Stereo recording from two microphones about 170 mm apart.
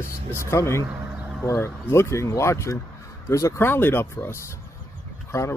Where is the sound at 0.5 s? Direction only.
15° left (ahead or behind).